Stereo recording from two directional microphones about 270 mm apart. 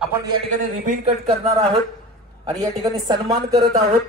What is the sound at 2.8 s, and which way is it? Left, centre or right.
Speech, centre.